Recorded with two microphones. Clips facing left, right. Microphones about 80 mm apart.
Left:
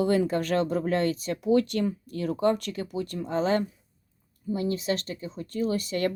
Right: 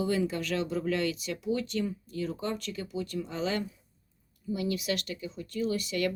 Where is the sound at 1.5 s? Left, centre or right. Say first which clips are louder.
Left 8 dB; left.